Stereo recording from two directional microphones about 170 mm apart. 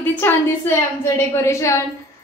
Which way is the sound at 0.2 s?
15° left (ahead or behind).